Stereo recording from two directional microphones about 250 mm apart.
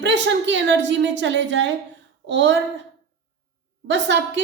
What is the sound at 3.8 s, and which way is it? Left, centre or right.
Speech, right.